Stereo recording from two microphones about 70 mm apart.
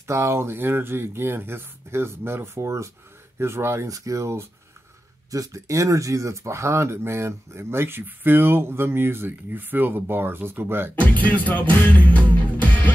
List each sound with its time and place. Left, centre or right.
0.0 s speech: right
3.9 s speech: right
11.0 s music: left